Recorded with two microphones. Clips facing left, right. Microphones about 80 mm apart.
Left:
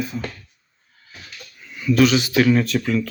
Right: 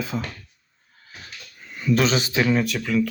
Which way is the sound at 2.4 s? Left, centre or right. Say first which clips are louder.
Left 6 dB; centre.